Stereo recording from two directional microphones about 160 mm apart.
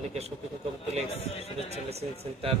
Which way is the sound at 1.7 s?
40° right (ahead or behind).